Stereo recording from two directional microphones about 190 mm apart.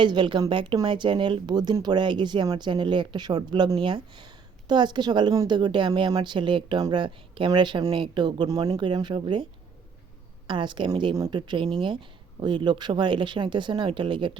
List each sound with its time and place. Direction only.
0.0 s a woman's voice: 25° right (ahead or behind)